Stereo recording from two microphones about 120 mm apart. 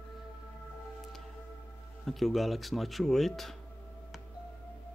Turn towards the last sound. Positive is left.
turn(degrees=0)  # may be behind; listen again after turning